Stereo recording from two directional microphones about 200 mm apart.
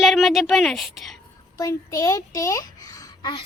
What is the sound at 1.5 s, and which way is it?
A child's voice, 15° left (ahead or behind).